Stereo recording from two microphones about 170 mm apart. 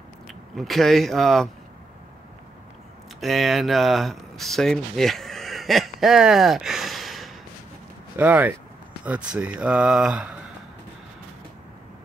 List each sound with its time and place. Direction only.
0.3 s speech: centre (ahead or behind)
3.2 s speech: centre (ahead or behind)